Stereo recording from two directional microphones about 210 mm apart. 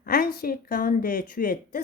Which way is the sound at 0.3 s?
45° left (ahead or behind).